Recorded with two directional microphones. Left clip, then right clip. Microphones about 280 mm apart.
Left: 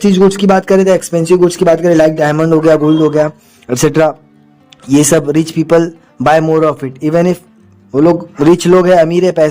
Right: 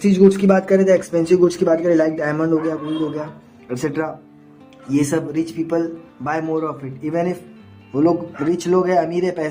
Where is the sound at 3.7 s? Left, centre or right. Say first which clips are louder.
Left 13 dB; left.